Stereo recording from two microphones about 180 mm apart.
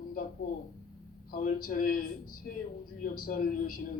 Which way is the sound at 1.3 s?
50° left (ahead or behind).